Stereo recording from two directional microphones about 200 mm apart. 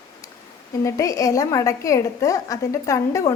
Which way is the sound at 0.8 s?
15° left (ahead or behind).